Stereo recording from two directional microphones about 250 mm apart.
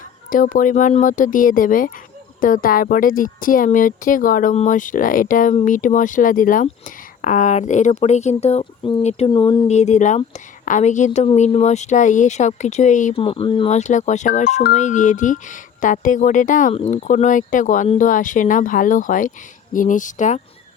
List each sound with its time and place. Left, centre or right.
0.3 s speech: left